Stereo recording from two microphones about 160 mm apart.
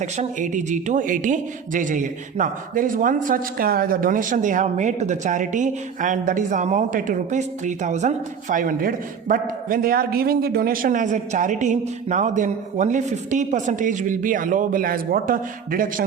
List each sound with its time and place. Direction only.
0.0 s a man's voice: 50° right (ahead or behind)